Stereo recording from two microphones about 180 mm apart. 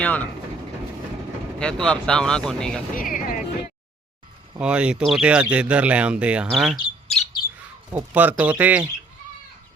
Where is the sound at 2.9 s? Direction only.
50° left (ahead or behind).